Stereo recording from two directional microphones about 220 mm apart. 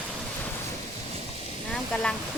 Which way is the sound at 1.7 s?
5° left (ahead or behind).